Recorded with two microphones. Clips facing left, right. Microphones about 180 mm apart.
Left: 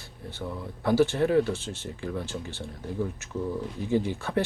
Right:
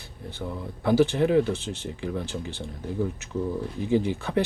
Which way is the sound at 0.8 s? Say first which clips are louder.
Right 2 dB; 15° right (ahead or behind).